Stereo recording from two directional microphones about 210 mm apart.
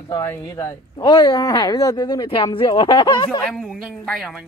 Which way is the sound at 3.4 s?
5° left (ahead or behind).